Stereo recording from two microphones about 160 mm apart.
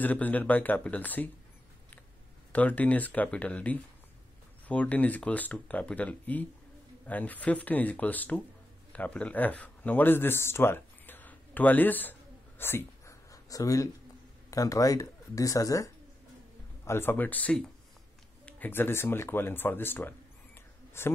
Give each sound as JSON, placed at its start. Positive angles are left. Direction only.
{"t": 0.0, "sound": "speech", "side_deg": 10}
{"t": 2.5, "sound": "speech", "side_deg": 10}
{"t": 8.9, "sound": "a sound", "side_deg": 10}
{"t": 14.5, "sound": "speech", "side_deg": 20}